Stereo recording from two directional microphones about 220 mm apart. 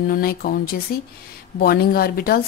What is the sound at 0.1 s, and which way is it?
A woman's voice, 40° left (ahead or behind).